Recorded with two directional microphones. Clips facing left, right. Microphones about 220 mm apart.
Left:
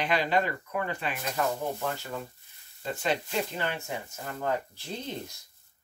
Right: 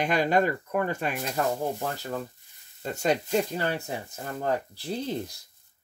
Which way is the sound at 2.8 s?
45° right (ahead or behind).